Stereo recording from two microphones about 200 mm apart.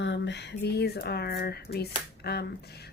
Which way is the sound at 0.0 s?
60° left (ahead or behind).